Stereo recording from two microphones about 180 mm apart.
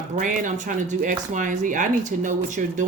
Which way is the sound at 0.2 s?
45° right (ahead or behind).